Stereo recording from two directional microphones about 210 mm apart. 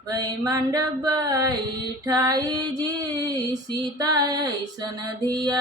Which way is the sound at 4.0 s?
20° right (ahead or behind).